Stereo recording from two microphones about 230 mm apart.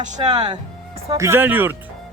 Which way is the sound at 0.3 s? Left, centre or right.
Centre.